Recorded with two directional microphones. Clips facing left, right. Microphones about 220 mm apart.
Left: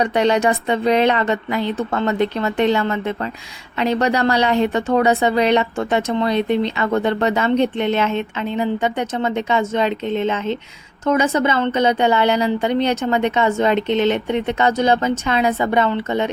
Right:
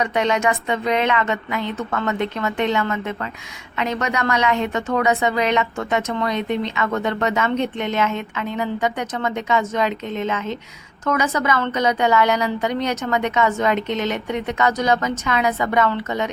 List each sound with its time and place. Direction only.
0.0 s a woman's voice: 35° left (ahead or behind)